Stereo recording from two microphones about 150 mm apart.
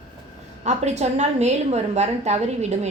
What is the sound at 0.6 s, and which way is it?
A woman's voice, 50° right (ahead or behind).